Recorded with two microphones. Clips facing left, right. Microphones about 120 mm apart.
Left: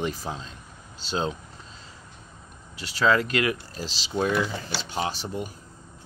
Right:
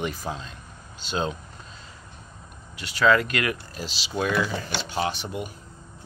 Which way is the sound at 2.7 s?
35° left (ahead or behind).